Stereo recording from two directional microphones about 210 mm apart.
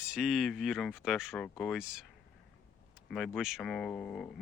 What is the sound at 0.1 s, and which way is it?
Speech, centre (ahead or behind).